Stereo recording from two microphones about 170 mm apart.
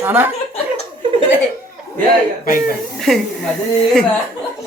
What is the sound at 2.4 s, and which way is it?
Speech, 55° left (ahead or behind).